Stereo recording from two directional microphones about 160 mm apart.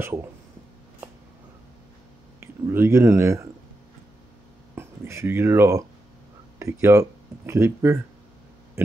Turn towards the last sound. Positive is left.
turn(degrees=-15)  # may be behind; listen again after turning